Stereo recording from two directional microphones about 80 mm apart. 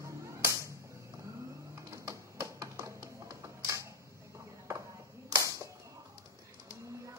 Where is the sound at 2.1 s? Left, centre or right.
Right.